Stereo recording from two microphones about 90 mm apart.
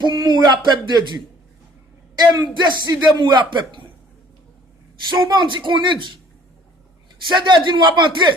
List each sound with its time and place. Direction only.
0.0 s speech: 50° right (ahead or behind)
2.6 s a man's voice: 55° right (ahead or behind)
5.0 s a man's voice: 55° right (ahead or behind)
7.3 s a man's voice: 55° right (ahead or behind)